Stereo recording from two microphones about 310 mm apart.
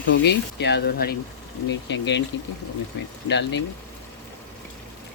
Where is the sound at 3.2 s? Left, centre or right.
Left.